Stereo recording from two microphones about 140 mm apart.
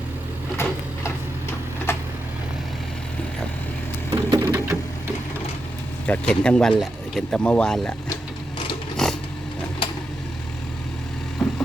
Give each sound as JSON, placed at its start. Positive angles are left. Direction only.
{"t": 0.5, "sound": "a sound", "side_deg": 20}
{"t": 1.9, "sound": "vehicle", "side_deg": 20}
{"t": 4.1, "sound": "splinter", "side_deg": -20}
{"t": 6.1, "sound": "speech", "side_deg": 5}
{"t": 9.0, "sound": "a sound", "side_deg": 5}
{"t": 11.4, "sound": "vehicle", "side_deg": 0}